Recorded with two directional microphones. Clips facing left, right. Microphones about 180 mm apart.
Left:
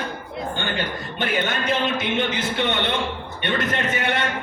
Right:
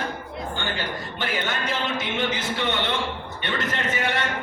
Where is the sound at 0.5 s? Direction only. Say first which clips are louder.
Left 2 dB; 20° left (ahead or behind).